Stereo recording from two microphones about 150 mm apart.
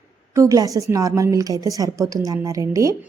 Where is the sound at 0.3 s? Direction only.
20° right (ahead or behind).